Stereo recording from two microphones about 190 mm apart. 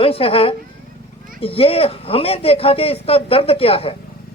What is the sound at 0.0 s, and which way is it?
Speech, 30° left (ahead or behind).